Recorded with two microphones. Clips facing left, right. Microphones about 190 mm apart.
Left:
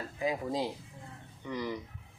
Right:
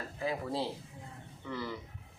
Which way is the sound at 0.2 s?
15° left (ahead or behind).